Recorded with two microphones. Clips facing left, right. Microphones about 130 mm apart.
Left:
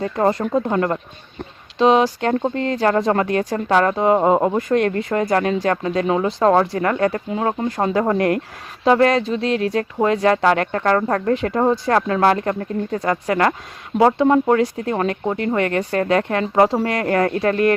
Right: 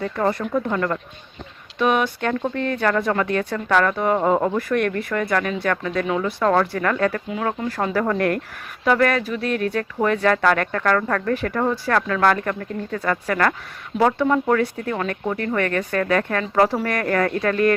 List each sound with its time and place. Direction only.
0.0 s speech: 25° left (ahead or behind)
2.0 s speech: 35° left (ahead or behind)
2.4 s speech: 20° left (ahead or behind)
13.0 s speech: 20° left (ahead or behind)